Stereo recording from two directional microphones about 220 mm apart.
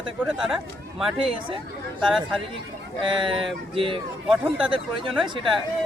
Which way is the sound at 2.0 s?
Centre (ahead or behind).